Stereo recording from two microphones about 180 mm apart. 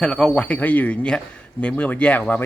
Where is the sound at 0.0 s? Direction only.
5° left (ahead or behind).